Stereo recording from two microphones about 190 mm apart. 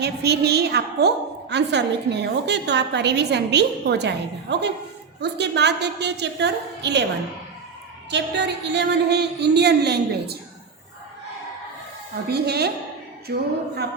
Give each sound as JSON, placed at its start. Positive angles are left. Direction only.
{"t": 0.0, "sound": "a woman's voice", "side_deg": -60}
{"t": 8.1, "sound": "a woman's voice", "side_deg": -65}
{"t": 12.3, "sound": "a woman's voice", "side_deg": -60}